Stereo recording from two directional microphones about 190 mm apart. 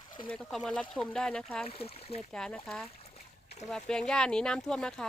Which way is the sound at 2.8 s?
30° left (ahead or behind).